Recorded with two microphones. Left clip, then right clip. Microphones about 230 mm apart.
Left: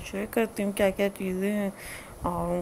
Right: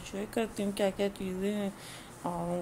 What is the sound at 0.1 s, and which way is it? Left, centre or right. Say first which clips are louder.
A woman's voice: left 6 dB; centre.